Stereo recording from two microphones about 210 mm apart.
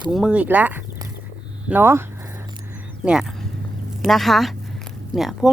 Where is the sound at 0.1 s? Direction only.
5° right (ahead or behind).